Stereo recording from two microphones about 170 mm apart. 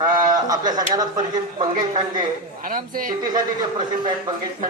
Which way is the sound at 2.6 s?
55° right (ahead or behind).